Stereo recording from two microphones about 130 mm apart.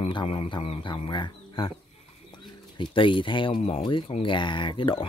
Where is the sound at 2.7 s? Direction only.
40° left (ahead or behind).